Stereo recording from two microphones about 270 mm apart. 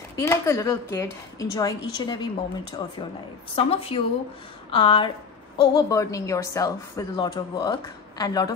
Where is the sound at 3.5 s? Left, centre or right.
Left.